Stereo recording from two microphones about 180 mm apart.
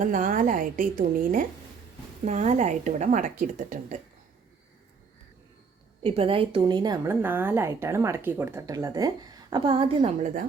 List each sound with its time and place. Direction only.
0.0 s a woman's voice: 45° right (ahead or behind)
6.0 s a woman's voice: 30° right (ahead or behind)